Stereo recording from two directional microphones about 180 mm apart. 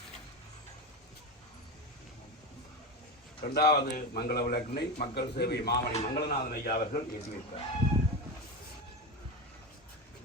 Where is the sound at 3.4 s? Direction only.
60° left (ahead or behind).